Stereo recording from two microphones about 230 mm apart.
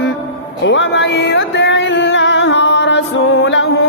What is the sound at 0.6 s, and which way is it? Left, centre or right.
Music, left.